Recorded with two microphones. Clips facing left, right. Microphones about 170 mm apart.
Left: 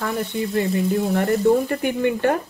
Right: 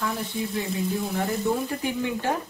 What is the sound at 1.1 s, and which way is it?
Speech, 60° left (ahead or behind).